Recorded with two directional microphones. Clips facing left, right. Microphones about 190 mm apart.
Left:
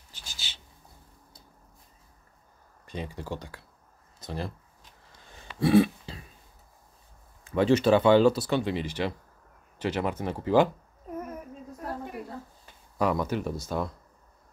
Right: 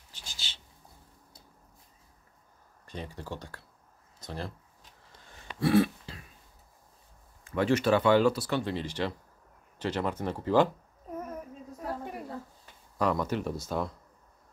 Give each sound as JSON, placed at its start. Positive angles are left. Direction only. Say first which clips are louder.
{"t": 0.1, "sound": "a sound", "louder": "left 1 dB", "side_deg": 5}
{"t": 2.8, "sound": "speech", "louder": "left 4 dB", "side_deg": 15}
{"t": 4.2, "sound": "a sound", "louder": "left 3 dB", "side_deg": 10}
{"t": 5.6, "sound": "throat clearing", "louder": "left 3 dB", "side_deg": 20}
{"t": 7.4, "sound": "speech", "louder": "left 4 dB", "side_deg": 20}
{"t": 12.9, "sound": "speech", "louder": "left 2 dB", "side_deg": 10}